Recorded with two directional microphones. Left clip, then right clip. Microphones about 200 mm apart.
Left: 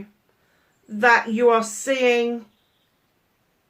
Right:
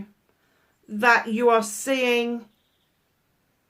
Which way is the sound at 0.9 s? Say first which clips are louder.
Left 2 dB; 50° right (ahead or behind).